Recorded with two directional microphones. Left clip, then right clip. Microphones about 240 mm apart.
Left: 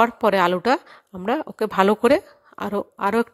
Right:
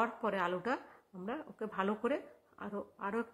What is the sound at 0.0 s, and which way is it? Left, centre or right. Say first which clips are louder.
Speech: left 17 dB; left.